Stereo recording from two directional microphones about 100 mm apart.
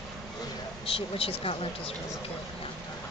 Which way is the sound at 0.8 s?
70° left (ahead or behind).